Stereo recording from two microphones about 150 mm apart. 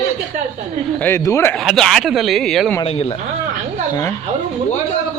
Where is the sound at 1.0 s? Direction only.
15° left (ahead or behind).